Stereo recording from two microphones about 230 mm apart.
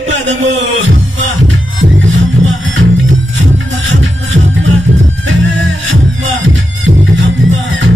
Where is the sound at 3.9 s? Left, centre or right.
Right.